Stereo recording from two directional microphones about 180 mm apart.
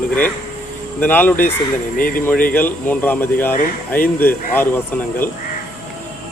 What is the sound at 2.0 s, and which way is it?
Speech, 50° left (ahead or behind).